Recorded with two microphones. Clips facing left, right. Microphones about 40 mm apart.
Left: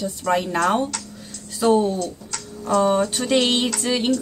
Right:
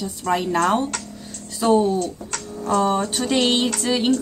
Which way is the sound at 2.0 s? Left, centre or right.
Right.